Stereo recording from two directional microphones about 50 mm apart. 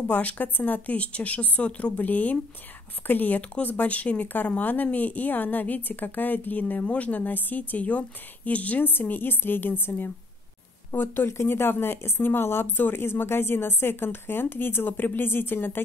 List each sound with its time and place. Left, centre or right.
0.0 s a woman's voice: left
8.8 s speech: left